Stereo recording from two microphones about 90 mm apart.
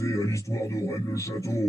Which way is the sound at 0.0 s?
35° left (ahead or behind).